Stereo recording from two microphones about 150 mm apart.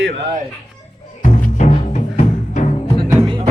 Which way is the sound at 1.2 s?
50° left (ahead or behind).